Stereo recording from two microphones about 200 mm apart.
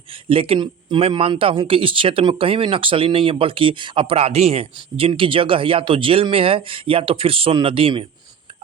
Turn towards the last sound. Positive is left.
turn(degrees=-25)  # may be behind; listen again after turning